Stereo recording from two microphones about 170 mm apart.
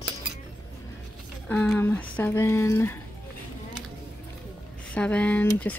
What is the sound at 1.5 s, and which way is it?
Speech, 5° left (ahead or behind).